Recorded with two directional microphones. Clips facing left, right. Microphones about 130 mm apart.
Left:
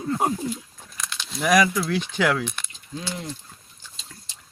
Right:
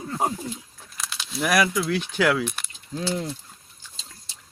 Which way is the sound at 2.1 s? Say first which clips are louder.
Right 2 dB; 5° right (ahead or behind).